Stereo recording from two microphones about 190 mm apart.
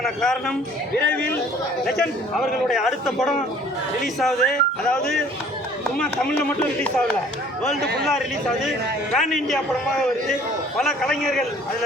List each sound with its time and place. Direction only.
0.0 s a man's voice: 5° left (ahead or behind)
7.8 s a man's voice: 60° right (ahead or behind)
9.1 s a man's voice: centre (ahead or behind)